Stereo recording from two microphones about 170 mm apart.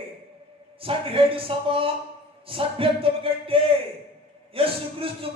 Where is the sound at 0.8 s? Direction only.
35° right (ahead or behind).